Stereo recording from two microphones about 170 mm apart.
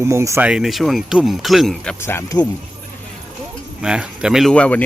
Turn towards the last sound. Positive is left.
turn(degrees=5)  # may be behind; listen again after turning